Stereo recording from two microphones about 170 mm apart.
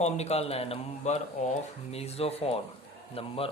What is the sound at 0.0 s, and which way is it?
Speech, 40° left (ahead or behind).